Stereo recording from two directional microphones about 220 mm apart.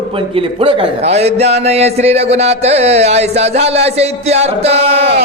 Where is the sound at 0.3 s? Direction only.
25° right (ahead or behind).